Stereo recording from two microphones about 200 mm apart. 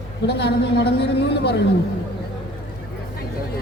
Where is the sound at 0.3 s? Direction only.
60° left (ahead or behind).